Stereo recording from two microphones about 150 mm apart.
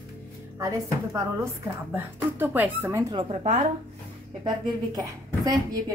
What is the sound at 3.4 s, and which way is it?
Speech, 50° right (ahead or behind).